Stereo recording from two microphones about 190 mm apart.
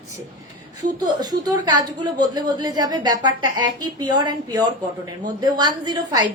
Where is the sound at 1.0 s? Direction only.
20° right (ahead or behind).